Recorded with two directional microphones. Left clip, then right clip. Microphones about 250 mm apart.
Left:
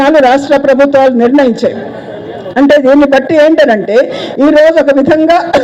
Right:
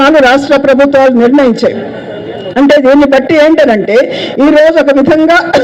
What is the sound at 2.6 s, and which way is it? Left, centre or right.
A woman's voice, right.